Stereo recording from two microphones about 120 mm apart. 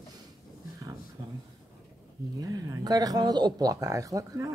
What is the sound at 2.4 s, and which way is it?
Speech, 30° right (ahead or behind).